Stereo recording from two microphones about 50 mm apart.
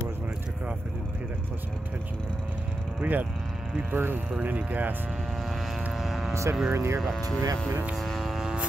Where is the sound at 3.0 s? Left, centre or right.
Right.